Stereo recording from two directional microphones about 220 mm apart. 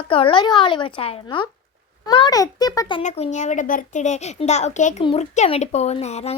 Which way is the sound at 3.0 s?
30° left (ahead or behind).